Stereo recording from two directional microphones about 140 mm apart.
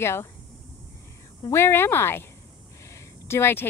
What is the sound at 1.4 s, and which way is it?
Speech, 20° left (ahead or behind).